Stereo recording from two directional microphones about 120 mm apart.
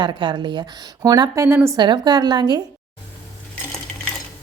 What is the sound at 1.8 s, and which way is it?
Speech, 40° right (ahead or behind).